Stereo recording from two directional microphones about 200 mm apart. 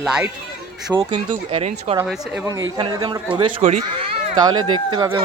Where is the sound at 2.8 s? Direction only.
25° right (ahead or behind).